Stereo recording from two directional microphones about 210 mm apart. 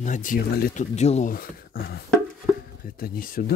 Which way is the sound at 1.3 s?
45° left (ahead or behind).